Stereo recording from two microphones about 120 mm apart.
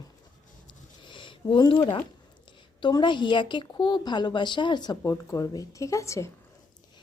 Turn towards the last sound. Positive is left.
turn(degrees=25)  # may be behind; listen again after turning